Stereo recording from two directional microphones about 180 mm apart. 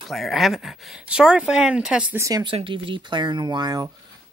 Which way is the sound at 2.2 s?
20° right (ahead or behind).